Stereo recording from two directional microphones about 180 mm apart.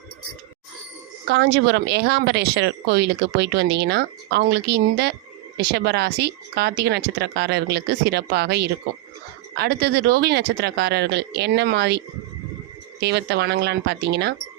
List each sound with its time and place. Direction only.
1.3 s speech: 65° right (ahead or behind)